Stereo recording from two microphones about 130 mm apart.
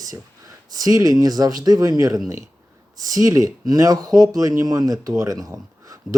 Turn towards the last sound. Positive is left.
turn(degrees=-25)  # may be behind; listen again after turning